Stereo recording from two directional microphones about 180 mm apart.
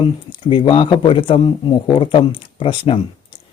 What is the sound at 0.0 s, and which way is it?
Speech, 25° left (ahead or behind).